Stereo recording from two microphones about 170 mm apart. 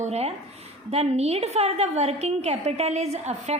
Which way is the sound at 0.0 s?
40° right (ahead or behind).